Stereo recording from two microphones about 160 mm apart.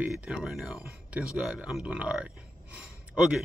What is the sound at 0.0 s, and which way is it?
Speech, 10° right (ahead or behind).